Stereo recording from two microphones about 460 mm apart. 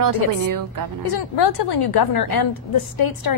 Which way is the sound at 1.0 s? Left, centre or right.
Left.